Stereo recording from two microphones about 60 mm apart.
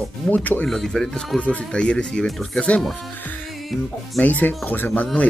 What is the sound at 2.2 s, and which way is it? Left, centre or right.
Speech, centre.